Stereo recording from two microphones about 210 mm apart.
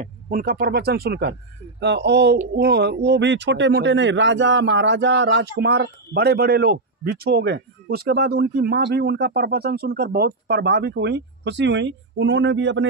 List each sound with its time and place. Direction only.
0.0 s speech: 40° right (ahead or behind); by 12.8 s 60° right (ahead or behind)